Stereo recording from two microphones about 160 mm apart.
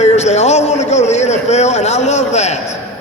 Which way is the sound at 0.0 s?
45° left (ahead or behind).